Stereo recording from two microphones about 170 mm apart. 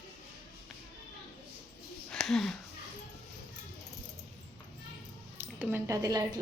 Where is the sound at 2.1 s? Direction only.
Centre (ahead or behind).